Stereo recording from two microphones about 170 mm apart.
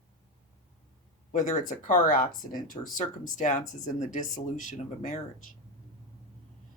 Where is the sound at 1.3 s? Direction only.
50° left (ahead or behind).